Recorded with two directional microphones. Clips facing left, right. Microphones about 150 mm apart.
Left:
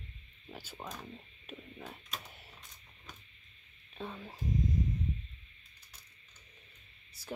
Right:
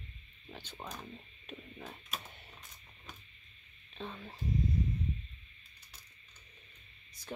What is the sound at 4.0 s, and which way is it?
Speech, 10° left (ahead or behind).